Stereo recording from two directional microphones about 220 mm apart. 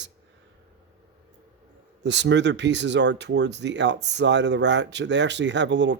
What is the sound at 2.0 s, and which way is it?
Speech, 55° right (ahead or behind).